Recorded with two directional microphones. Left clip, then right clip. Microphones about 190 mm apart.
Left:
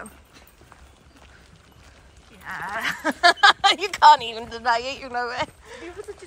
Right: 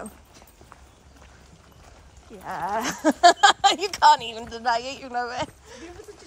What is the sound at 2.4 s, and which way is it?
A woman's voice, 20° right (ahead or behind).